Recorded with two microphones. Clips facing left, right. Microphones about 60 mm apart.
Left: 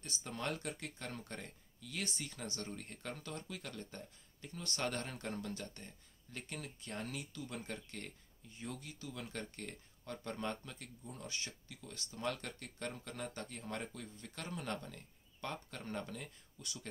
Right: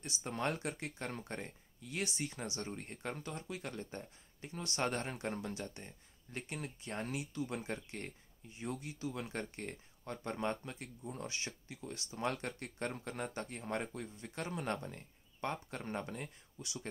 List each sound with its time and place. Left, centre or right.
0.2 s speech: right
12.3 s speech: right